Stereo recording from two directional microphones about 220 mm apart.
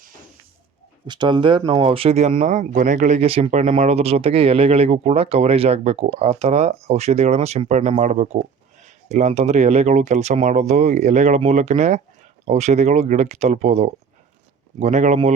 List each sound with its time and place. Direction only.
1.0 s speech: 20° right (ahead or behind)